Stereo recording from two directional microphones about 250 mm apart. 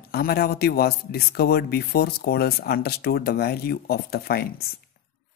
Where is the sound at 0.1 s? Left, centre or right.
Left.